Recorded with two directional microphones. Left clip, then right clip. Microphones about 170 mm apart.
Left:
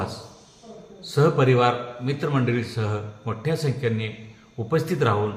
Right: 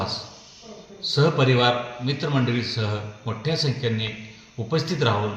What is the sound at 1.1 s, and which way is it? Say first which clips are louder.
A man's voice: left 1 dB; 15° left (ahead or behind).